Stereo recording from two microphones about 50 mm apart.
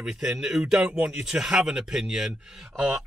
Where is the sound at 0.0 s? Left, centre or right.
Centre.